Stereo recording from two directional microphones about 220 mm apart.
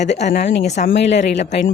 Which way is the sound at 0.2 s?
30° left (ahead or behind).